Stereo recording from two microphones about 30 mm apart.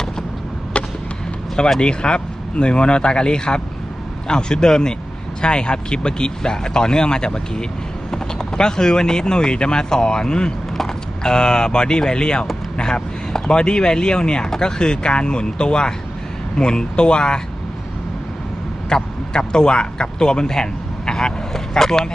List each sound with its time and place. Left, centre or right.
0.7 s a sound: left
1.8 s speech: left
18.9 s speech: left